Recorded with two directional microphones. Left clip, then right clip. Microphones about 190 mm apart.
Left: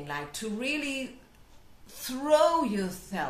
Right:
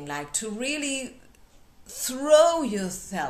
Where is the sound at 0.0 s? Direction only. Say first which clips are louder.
Right 3 dB; 45° right (ahead or behind).